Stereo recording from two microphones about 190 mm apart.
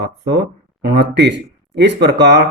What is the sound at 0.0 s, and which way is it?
Speech, 60° right (ahead or behind).